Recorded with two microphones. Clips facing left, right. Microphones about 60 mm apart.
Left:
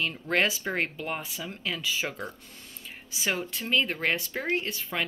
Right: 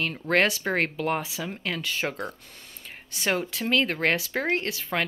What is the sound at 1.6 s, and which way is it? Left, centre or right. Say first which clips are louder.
Speech: right 1 dB; right.